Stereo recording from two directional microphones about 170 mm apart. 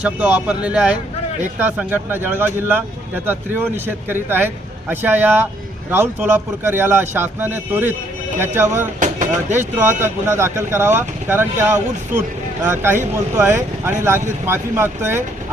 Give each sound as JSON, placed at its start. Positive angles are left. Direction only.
{"t": 0.2, "sound": "a man's voice", "side_deg": -5}
{"t": 9.0, "sound": "speech", "side_deg": -45}
{"t": 9.6, "sound": "a man's voice", "side_deg": -10}